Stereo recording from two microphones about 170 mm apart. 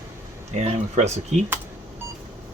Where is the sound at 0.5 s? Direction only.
40° right (ahead or behind).